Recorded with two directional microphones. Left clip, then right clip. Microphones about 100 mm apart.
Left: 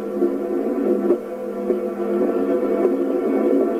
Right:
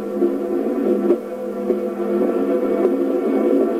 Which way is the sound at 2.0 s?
30° right (ahead or behind).